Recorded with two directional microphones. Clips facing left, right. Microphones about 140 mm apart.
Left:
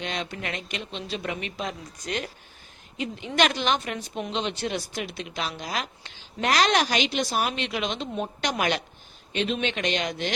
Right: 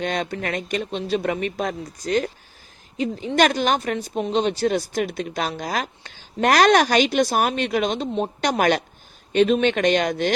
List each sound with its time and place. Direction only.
0.0 s speech: 45° right (ahead or behind)